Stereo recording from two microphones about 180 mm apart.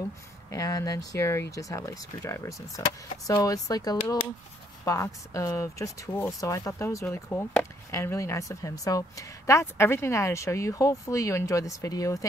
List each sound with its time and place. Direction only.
0.5 s a woman's voice: 20° left (ahead or behind)